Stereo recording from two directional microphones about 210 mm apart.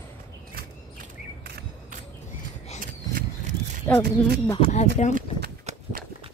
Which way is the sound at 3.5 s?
35° right (ahead or behind).